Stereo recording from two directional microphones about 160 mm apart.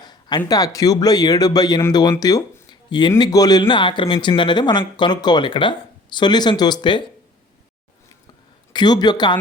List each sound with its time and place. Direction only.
0.0 s speech: 25° left (ahead or behind)
8.7 s speech: 25° left (ahead or behind)